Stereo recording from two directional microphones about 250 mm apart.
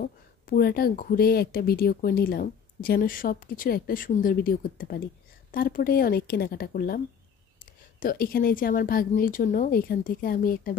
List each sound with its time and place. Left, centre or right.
0.0 s speech: left